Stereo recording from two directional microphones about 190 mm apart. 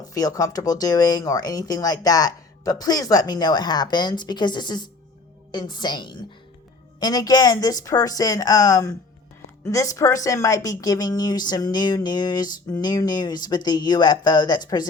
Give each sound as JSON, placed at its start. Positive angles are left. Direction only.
{"t": 0.1, "sound": "a woman's voice", "side_deg": 20}